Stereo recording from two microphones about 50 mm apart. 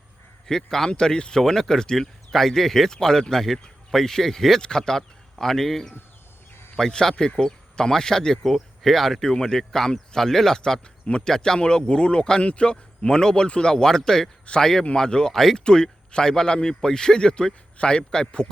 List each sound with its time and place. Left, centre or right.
0.4 s a man's voice: centre